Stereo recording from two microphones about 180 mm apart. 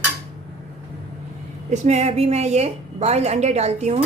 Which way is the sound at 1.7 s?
40° right (ahead or behind).